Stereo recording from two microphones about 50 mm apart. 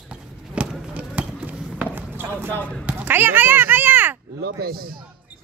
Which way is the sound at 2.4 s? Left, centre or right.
Left.